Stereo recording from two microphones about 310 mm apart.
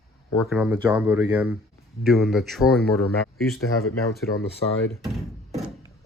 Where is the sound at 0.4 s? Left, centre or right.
Centre.